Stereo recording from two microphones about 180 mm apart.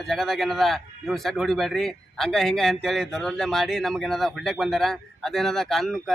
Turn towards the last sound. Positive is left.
turn(degrees=0)  # may be behind; listen again after turning